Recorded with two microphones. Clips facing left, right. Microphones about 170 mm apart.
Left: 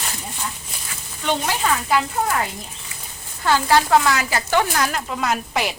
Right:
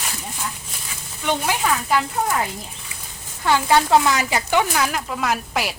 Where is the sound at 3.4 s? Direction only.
15° right (ahead or behind).